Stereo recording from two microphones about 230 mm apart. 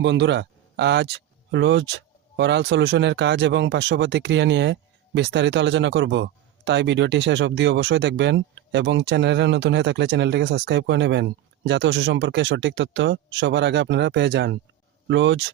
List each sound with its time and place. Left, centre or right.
0.0 s speech: right